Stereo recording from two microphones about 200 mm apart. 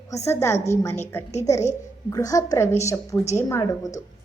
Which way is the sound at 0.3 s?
15° left (ahead or behind).